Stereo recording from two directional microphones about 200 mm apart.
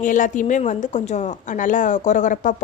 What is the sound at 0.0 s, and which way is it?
A woman's voice, 40° left (ahead or behind).